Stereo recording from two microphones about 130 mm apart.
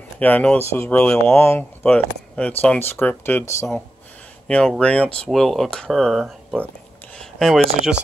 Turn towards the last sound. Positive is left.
turn(degrees=0)  # may be behind; listen again after turning